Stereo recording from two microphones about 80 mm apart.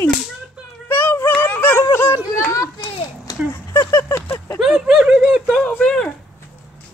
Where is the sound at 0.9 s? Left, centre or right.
Left.